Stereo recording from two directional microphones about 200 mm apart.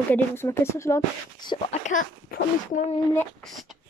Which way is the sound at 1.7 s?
40° left (ahead or behind).